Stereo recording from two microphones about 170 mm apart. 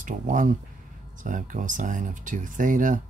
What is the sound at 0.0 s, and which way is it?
Speech, 50° right (ahead or behind).